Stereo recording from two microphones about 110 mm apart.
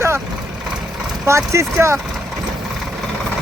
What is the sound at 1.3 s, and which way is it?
Speech, 25° right (ahead or behind).